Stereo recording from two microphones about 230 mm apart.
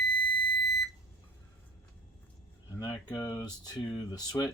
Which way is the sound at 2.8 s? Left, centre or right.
Centre.